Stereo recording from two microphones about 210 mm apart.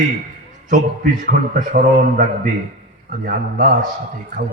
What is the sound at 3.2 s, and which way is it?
Speech, 40° right (ahead or behind).